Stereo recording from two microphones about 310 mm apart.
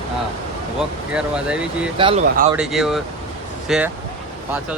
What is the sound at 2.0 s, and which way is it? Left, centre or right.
Speech, centre.